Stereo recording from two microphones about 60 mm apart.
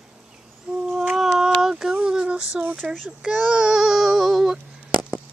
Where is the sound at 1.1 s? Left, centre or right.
Centre.